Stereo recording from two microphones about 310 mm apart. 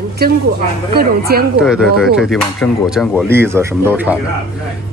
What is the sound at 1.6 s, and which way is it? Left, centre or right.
Speech, centre.